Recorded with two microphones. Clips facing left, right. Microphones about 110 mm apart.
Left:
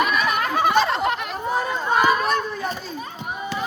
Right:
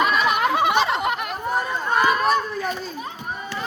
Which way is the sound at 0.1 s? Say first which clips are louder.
Right 2 dB; 25° right (ahead or behind).